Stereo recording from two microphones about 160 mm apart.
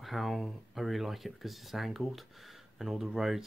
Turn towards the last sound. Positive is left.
turn(degrees=0)  # may be behind; listen again after turning